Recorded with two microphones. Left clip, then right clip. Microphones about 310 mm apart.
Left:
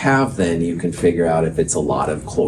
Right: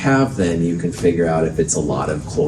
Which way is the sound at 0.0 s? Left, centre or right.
Left.